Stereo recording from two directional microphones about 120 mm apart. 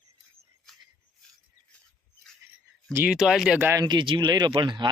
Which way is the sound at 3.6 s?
20° right (ahead or behind).